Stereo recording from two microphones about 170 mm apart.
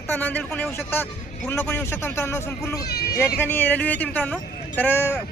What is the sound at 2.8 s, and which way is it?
Speech, 65° left (ahead or behind).